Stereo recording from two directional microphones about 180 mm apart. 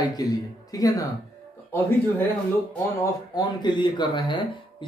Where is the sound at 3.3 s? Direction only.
25° left (ahead or behind).